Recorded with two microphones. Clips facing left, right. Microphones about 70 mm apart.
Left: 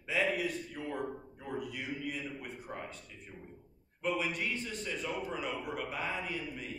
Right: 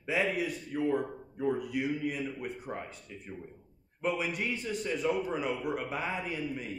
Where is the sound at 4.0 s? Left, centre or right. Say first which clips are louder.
Right 2 dB; centre.